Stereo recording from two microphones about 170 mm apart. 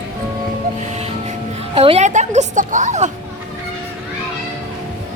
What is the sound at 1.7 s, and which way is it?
Music, 35° right (ahead or behind).